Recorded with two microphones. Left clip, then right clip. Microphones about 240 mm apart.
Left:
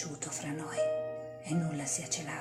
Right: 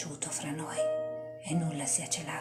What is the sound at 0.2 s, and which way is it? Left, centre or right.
Music, centre.